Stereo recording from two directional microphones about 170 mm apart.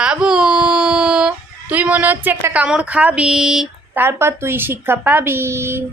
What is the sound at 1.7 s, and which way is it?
Speech, 10° right (ahead or behind).